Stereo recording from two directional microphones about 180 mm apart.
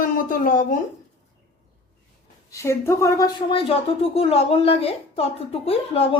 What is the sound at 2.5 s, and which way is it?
Speech, 15° left (ahead or behind).